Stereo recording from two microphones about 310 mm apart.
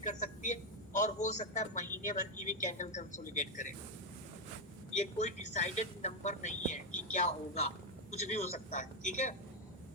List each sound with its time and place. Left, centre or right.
0.0 s vehicle: left
0.9 s speech: left
4.9 s speech: left